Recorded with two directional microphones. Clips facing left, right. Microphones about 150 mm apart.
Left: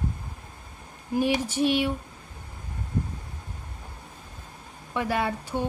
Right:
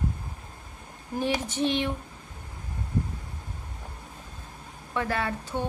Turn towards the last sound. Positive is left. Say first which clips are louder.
# left 2 dB
turn(degrees=10)  # may be behind; listen again after turning